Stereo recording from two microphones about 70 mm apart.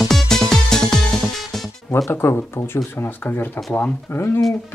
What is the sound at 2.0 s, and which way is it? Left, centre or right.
Speech, left.